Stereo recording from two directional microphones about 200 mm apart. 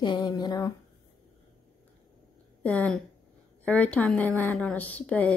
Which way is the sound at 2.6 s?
5° left (ahead or behind).